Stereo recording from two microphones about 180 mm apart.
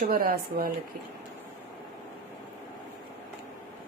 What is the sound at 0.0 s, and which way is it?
Speech, 50° right (ahead or behind).